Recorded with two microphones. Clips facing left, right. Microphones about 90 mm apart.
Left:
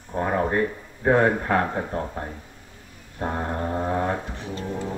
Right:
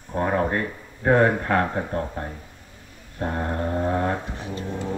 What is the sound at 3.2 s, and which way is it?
Speech, 15° left (ahead or behind).